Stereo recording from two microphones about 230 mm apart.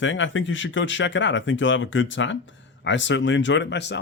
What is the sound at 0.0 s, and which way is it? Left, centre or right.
Speech, left.